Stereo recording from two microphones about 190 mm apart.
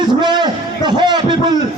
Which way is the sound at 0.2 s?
25° right (ahead or behind).